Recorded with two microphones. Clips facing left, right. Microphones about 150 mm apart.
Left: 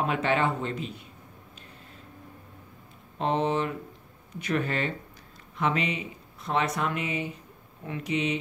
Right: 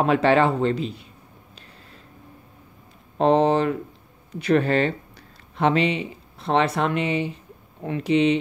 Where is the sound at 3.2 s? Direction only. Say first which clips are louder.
Right 8 dB; 90° right.